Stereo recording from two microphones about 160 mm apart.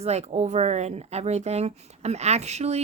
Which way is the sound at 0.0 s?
40° right (ahead or behind).